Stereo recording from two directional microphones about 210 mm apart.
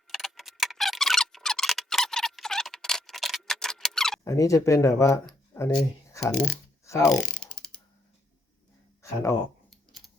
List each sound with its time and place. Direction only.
0.1 s a sound: centre (ahead or behind)
4.2 s speech: 15° left (ahead or behind)
5.5 s a sound: 10° left (ahead or behind)
6.2 s speech: 5° left (ahead or behind)
6.8 s ratchet: 15° left (ahead or behind)
7.1 s mechanisms: 5° left (ahead or behind)
9.0 s speech: 15° left (ahead or behind)